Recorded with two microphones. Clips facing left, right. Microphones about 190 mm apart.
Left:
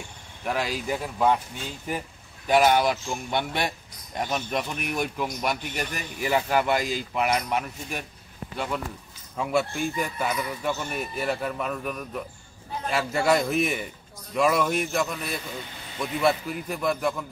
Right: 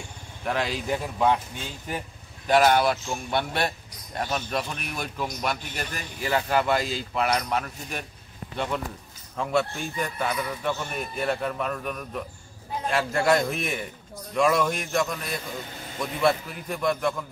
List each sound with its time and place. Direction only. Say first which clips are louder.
0.5 s speech: right 1 dB; 5° left (ahead or behind)
2.4 s a man's voice: even; 10° left (ahead or behind)